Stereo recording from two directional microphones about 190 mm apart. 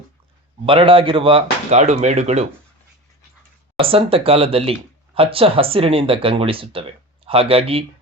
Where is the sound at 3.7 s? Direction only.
30° right (ahead or behind).